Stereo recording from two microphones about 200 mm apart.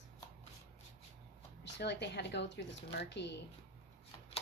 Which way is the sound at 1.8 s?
55° left (ahead or behind).